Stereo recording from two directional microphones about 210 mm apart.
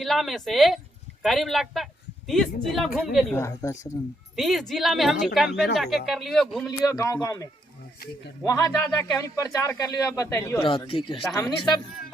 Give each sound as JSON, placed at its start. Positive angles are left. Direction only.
{"t": 0.0, "sound": "speech", "side_deg": 0}
{"t": 3.3, "sound": "speech", "side_deg": 15}
{"t": 4.4, "sound": "speech", "side_deg": 0}
{"t": 6.9, "sound": "speech", "side_deg": 15}
{"t": 8.4, "sound": "speech", "side_deg": 15}